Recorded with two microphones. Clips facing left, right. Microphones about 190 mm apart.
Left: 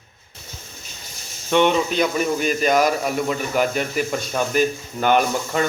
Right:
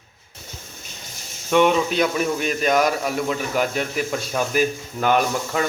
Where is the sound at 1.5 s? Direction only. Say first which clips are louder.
Even; centre (ahead or behind).